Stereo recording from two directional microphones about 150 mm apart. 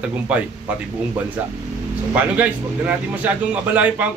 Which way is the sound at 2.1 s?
10° right (ahead or behind).